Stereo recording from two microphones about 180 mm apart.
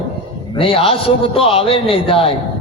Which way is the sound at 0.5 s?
30° left (ahead or behind).